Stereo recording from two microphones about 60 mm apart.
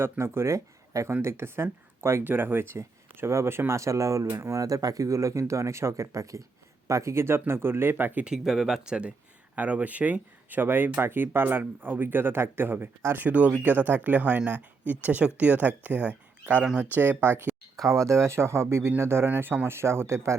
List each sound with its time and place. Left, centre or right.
0.0 s speech: right
1.2 s speech: right
2.2 s speech: right
2.7 s speech: right
4.3 s speech: right
4.5 s speech: right
8.2 s speech: centre; by 13.2 s right
13.2 s speech: right
16.9 s speech: right
17.8 s speech: right